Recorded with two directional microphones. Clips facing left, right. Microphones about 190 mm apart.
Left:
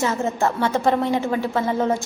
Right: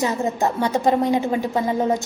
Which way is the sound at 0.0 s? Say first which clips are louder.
Even; 15° right (ahead or behind).